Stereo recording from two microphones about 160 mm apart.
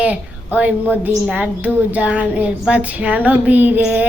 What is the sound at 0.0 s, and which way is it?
Speech, 10° right (ahead or behind).